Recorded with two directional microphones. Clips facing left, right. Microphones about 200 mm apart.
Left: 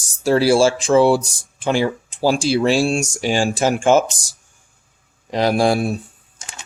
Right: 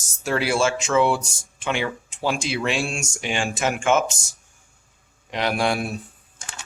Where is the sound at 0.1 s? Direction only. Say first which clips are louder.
Left 9 dB; 35° left (ahead or behind).